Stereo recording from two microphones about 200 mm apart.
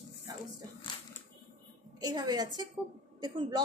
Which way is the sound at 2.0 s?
20° right (ahead or behind).